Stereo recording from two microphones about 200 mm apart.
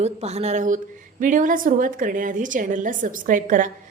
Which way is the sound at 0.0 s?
30° right (ahead or behind).